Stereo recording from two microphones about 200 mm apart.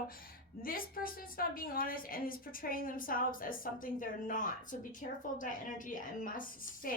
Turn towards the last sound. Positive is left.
turn(degrees=40)  # may be behind; listen again after turning